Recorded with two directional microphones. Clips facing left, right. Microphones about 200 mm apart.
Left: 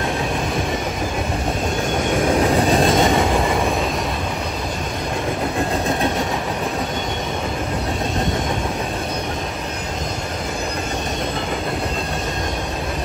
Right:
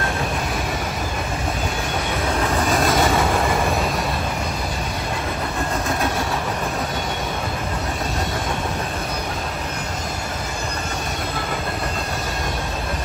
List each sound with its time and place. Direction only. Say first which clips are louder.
2.5 s train: left 4 dB; 30° left (ahead or behind)